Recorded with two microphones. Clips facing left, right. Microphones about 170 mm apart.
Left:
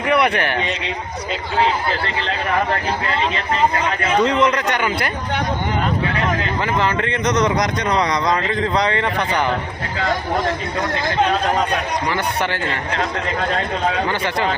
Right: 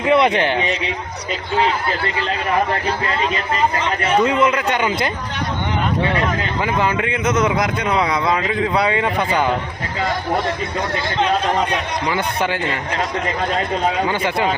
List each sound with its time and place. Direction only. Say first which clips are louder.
0.0 s speech: right 3 dB; 20° right (ahead or behind)
4.2 s speech: left 1 dB; 5° right (ahead or behind)
4.8 s speech: right 2 dB; 20° right (ahead or behind)
6.7 s speech: even; 10° right (ahead or behind)
12.1 s speech: right 1 dB; 15° right (ahead or behind)
14.1 s speech: right 1 dB; 15° right (ahead or behind)